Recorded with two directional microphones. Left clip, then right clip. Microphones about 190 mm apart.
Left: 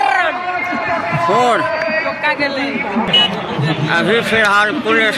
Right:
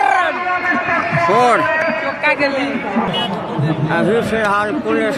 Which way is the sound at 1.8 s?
45° right (ahead or behind).